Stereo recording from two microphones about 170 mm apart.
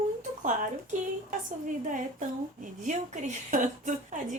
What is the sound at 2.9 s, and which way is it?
A woman's voice, 45° right (ahead or behind).